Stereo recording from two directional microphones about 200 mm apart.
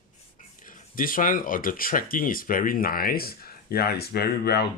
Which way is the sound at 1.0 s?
45° left (ahead or behind).